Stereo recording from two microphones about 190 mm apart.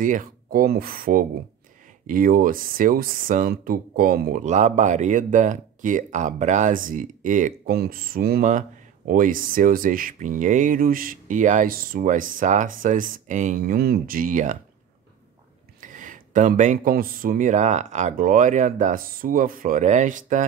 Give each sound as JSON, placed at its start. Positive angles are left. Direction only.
{"t": 0.0, "sound": "speech", "side_deg": -45}
{"t": 15.8, "sound": "speech", "side_deg": -45}